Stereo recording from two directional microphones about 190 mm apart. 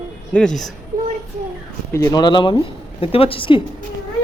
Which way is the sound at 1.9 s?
15° left (ahead or behind).